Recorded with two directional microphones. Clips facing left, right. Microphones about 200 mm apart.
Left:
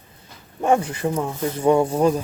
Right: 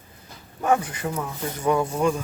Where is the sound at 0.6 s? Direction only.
25° left (ahead or behind).